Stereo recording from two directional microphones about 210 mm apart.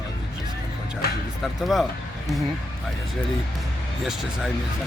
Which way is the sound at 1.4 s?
Centre (ahead or behind).